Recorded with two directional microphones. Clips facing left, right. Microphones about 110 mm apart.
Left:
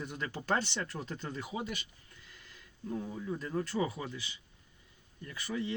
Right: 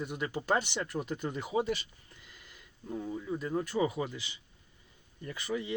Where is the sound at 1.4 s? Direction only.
30° right (ahead or behind).